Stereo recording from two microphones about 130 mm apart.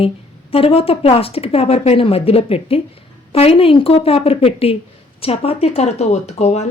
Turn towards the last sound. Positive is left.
turn(degrees=60)  # may be behind; listen again after turning